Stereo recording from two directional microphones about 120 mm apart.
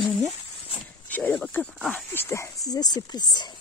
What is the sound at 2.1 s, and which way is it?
Speech, 20° left (ahead or behind).